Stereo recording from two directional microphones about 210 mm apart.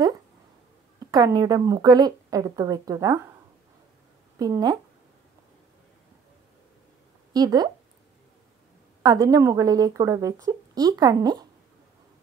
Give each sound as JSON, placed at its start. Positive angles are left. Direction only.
{"t": 0.9, "sound": "speech", "side_deg": -20}
{"t": 4.4, "sound": "speech", "side_deg": -20}
{"t": 7.3, "sound": "speech", "side_deg": -20}
{"t": 9.0, "sound": "speech", "side_deg": -15}